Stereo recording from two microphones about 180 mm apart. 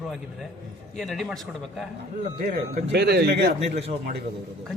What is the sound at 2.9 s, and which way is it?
Speech, 65° right (ahead or behind).